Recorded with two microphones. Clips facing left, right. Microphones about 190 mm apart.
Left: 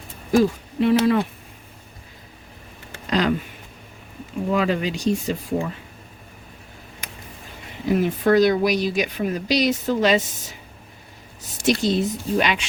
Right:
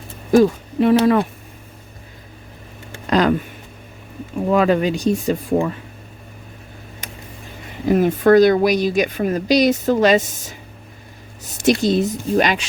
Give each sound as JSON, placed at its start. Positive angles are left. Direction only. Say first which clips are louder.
{"t": 0.8, "sound": "a woman's voice", "louder": "right 4 dB", "side_deg": -50}
{"t": 3.1, "sound": "a sound", "louder": "right 5 dB", "side_deg": -50}
{"t": 4.4, "sound": "a woman's voice", "louder": "right 6 dB", "side_deg": -50}
{"t": 7.9, "sound": "a woman's voice", "louder": "right 5 dB", "side_deg": -50}
{"t": 11.6, "sound": "a woman's voice", "louder": "right 4 dB", "side_deg": -45}